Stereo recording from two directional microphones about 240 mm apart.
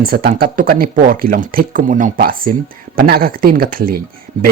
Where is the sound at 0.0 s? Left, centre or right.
Right.